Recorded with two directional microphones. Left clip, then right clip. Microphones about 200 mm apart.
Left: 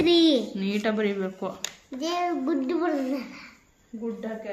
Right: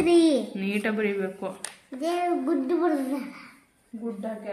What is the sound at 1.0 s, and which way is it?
Speech, 40° left (ahead or behind).